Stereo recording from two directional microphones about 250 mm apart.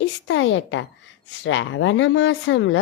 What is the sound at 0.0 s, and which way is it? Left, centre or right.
Speech, left.